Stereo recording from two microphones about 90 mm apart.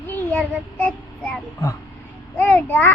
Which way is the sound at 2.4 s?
20° left (ahead or behind).